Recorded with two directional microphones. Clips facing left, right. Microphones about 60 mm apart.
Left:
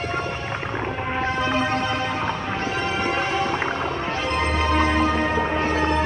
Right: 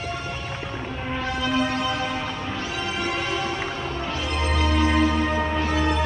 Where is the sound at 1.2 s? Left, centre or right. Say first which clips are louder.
Left 1 dB; left.